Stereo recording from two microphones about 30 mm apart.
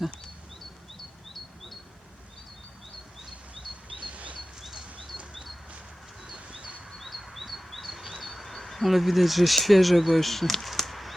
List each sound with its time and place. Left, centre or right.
0.9 s bird: centre
3.9 s bird: right
6.3 s a sound: right
6.9 s chirp: centre
8.4 s speech: centre
10.8 s a sound: centre